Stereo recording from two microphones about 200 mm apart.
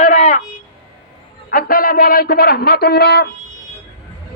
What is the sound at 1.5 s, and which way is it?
A man's voice, 45° left (ahead or behind).